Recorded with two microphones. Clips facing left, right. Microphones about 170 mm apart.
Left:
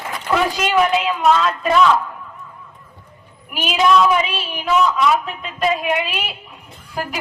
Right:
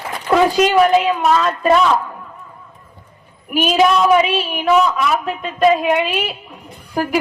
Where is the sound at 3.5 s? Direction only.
50° right (ahead or behind).